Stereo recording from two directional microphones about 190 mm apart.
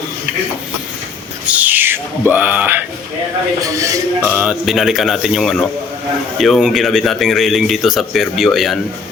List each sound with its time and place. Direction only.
1.5 s a sound: 10° right (ahead or behind)
3.6 s speech: 15° right (ahead or behind)
4.2 s a man's voice: 5° right (ahead or behind)